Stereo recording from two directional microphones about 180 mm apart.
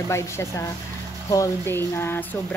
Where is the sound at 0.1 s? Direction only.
15° left (ahead or behind).